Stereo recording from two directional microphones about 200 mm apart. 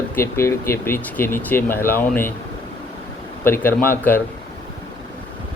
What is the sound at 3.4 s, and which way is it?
Speech, 10° left (ahead or behind).